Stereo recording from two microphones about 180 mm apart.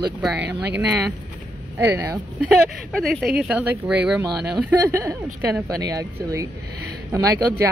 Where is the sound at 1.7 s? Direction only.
15° right (ahead or behind).